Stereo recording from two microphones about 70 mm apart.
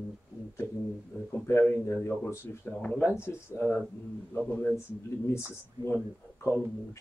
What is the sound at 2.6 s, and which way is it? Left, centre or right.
Speech, centre.